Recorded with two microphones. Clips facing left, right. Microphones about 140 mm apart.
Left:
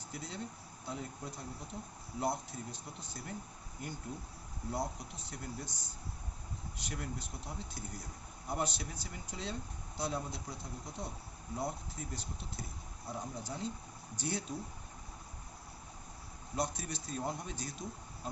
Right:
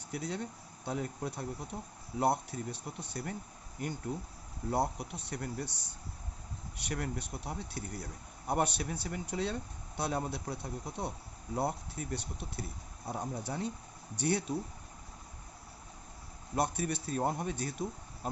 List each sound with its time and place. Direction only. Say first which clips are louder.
0.1 s speech: right 6 dB; 65° right (ahead or behind)
4.7 s speech: right 6 dB; 65° right (ahead or behind)
16.6 s speech: right 5 dB; 60° right (ahead or behind)